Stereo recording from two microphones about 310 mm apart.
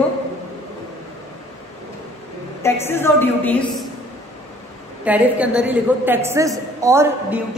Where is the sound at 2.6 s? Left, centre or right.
Centre.